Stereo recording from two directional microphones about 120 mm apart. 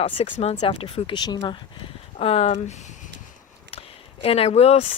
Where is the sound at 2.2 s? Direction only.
55° left (ahead or behind).